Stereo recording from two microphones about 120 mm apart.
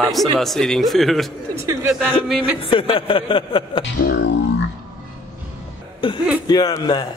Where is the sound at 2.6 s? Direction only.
50° left (ahead or behind).